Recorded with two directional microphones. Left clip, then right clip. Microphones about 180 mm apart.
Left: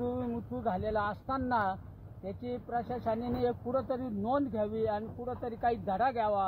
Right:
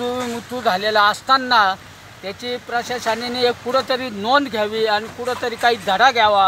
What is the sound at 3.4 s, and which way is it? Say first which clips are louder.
Speech: right 15 dB; 45° right (ahead or behind).